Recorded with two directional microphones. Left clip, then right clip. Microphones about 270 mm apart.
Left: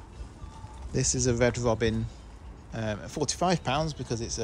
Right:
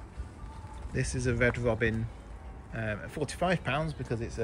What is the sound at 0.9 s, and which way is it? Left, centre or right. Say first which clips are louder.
Speech: left 5 dB; centre.